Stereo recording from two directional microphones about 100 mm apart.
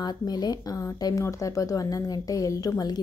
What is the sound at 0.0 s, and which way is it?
A woman's voice, 40° left (ahead or behind).